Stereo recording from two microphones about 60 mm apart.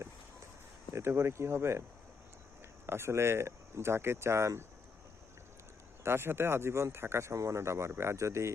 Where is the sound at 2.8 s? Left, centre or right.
Right.